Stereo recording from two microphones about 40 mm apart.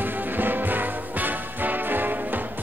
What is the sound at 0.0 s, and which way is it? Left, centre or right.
Music, right.